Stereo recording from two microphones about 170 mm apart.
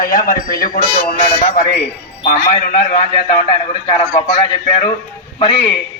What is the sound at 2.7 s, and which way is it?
Speech, 45° left (ahead or behind).